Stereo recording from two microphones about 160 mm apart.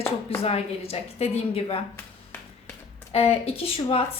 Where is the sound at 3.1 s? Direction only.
40° left (ahead or behind).